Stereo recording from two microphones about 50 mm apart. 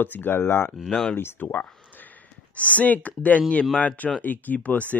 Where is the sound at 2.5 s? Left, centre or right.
Left.